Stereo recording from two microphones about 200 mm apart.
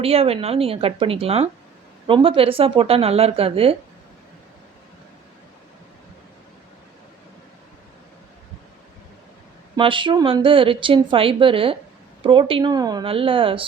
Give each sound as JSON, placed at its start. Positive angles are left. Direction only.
{"t": 0.0, "sound": "a woman's voice", "side_deg": -30}
{"t": 9.7, "sound": "a woman's voice", "side_deg": -25}